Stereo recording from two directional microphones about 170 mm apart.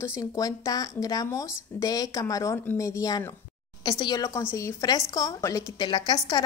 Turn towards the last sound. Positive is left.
turn(degrees=25)  # may be behind; listen again after turning